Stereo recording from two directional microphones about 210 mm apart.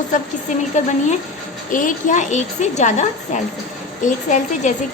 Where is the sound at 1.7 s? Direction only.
40° left (ahead or behind).